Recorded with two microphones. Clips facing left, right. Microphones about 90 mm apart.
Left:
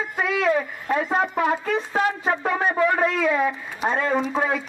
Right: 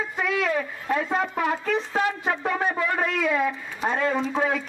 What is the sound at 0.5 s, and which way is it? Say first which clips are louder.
A woman's voice: left 4 dB; 25° left (ahead or behind).